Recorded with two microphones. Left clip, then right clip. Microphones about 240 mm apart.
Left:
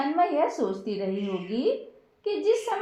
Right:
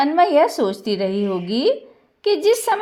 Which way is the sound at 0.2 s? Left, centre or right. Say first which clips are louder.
Right 9 dB; right.